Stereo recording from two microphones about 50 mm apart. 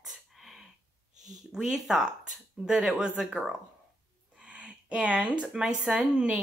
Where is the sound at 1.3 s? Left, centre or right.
Centre.